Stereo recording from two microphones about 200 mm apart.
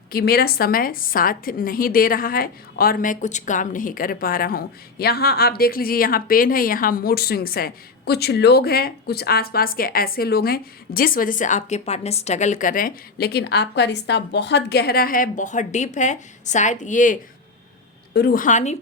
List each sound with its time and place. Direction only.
0.1 s a woman's voice: 50° left (ahead or behind)
18.1 s a woman's voice: 50° left (ahead or behind); by 18.8 s 35° left (ahead or behind)